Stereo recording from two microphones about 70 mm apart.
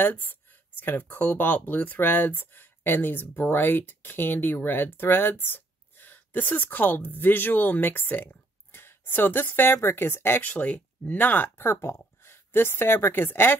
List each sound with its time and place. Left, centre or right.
0.0 s speech: left
10.5 s speech: left